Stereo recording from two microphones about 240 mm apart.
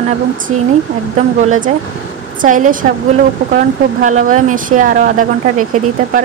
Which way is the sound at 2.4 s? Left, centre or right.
Right.